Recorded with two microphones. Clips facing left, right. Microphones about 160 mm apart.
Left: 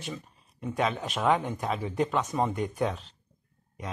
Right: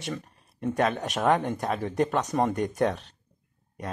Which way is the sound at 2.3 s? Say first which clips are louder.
Right 3 dB; 75° right (ahead or behind).